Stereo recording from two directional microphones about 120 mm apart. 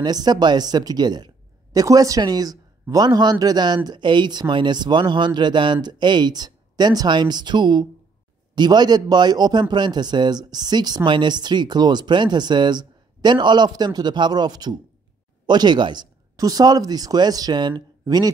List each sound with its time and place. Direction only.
0.0 s speech: 35° right (ahead or behind)